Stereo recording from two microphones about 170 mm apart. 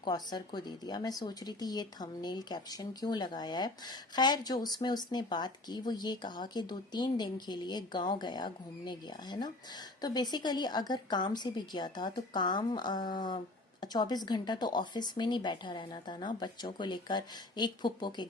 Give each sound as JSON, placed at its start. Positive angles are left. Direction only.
{"t": 0.0, "sound": "speech", "side_deg": 25}